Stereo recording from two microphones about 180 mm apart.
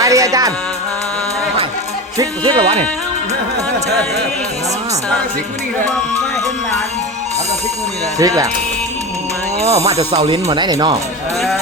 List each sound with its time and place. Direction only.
0.0 s speech: 20° right (ahead or behind)
2.1 s speech: 25° right (ahead or behind)
8.2 s speech: 20° right (ahead or behind)
9.6 s ratchet: 15° right (ahead or behind)
9.9 s speech: 35° right (ahead or behind)